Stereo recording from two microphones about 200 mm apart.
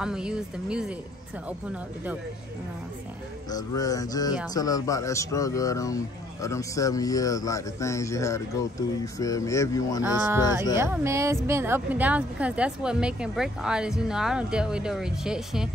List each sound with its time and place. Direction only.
0.0 s a woman's voice: 5° right (ahead or behind)
3.4 s music: 20° left (ahead or behind)
4.6 s speech: 20° left (ahead or behind)
10.8 s a woman's voice: 15° right (ahead or behind)